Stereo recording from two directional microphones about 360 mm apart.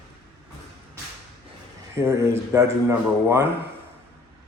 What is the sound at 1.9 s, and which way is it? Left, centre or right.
Speech, centre.